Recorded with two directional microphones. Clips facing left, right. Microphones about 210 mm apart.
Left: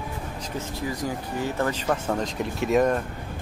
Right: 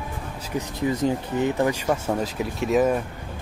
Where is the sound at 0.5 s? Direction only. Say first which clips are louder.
Right 6 dB; 20° right (ahead or behind); by 3.0 s 5° right (ahead or behind).